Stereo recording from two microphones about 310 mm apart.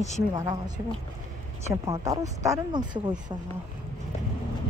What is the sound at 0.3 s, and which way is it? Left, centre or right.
Speech, centre.